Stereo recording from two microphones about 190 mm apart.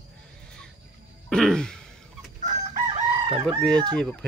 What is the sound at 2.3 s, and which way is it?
Chicken, 40° right (ahead or behind).